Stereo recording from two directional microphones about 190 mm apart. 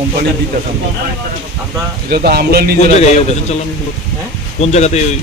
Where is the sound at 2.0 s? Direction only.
55° right (ahead or behind).